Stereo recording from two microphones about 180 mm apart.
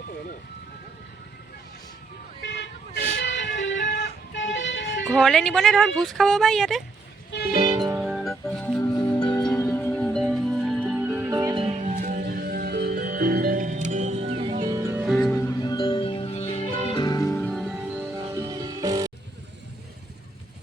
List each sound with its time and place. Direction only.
2.4 s vehicle: 75° left (ahead or behind)
5.0 s speech: centre (ahead or behind)
7.7 s music: 20° right (ahead or behind)
8.0 s music: centre (ahead or behind); by 9.5 s 25° left (ahead or behind)
9.5 s music: 15° left (ahead or behind); by 11.5 s 15° right (ahead or behind)
11.5 s music: 30° right (ahead or behind)
14.7 s music: 15° right (ahead or behind)
15.0 s music: centre (ahead or behind)
15.4 s music: 20° left (ahead or behind); by 17.7 s centre (ahead or behind)
17.9 s music: 10° right (ahead or behind)
18.3 s music: 20° right (ahead or behind)